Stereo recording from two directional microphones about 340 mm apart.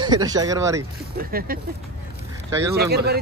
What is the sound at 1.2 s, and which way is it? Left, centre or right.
Speech, right.